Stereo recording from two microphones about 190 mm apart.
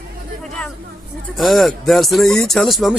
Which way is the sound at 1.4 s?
Centre (ahead or behind).